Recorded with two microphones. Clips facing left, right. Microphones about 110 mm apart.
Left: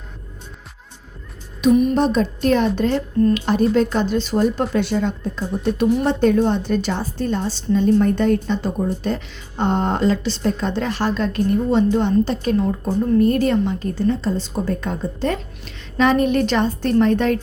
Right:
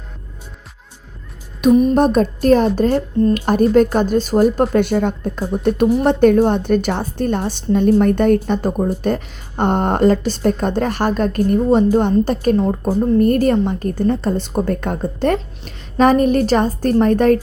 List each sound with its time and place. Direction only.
1.6 s a woman's voice: 55° right (ahead or behind)